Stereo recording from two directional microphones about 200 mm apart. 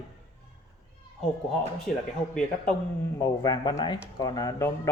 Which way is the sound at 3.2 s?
20° left (ahead or behind).